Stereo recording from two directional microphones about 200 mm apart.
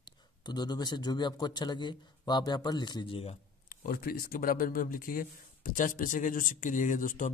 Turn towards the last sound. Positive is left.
turn(degrees=40)  # may be behind; listen again after turning